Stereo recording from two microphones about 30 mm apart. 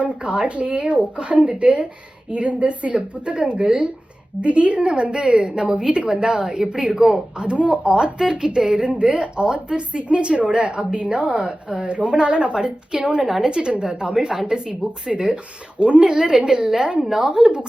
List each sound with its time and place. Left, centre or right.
0.0 s speech: right
5.1 s a woman's voice: right
6.2 s a woman's voice: right
6.7 s a woman's voice: right
7.9 s a woman's voice: right
11.8 s a woman's voice: right
14.7 s a woman's voice: right
17.0 s a woman's voice: centre